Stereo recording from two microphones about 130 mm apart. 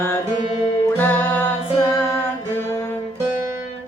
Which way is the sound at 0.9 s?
15° left (ahead or behind).